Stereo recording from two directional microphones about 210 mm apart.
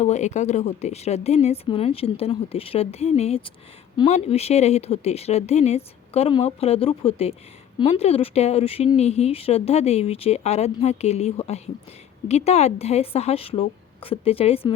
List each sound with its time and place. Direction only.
0.0 s speech: 35° left (ahead or behind)